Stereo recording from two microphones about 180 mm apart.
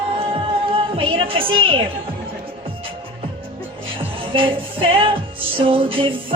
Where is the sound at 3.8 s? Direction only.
30° right (ahead or behind).